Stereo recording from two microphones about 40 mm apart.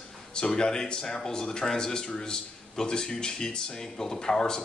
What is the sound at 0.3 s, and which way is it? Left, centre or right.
Speech, centre.